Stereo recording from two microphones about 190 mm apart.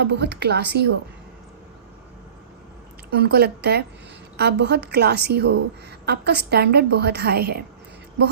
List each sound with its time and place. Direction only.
0.0 s a woman's voice: 60° right (ahead or behind)
3.1 s a woman's voice: 60° right (ahead or behind)